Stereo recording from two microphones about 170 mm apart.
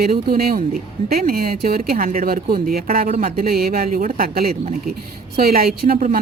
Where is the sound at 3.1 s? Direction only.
45° right (ahead or behind).